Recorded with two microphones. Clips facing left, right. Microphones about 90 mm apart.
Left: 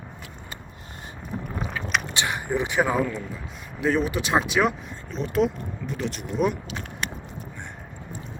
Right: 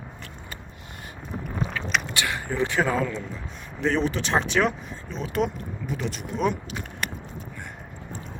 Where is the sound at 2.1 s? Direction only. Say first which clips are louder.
Even; 20° left (ahead or behind); by 6.6 s 5° left (ahead or behind).